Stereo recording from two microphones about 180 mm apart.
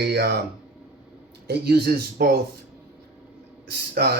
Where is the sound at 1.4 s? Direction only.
60° right (ahead or behind).